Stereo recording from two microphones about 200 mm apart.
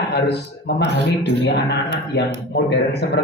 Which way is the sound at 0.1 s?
55° left (ahead or behind).